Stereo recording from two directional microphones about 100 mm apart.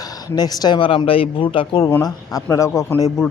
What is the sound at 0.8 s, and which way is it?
A man's voice, 60° left (ahead or behind).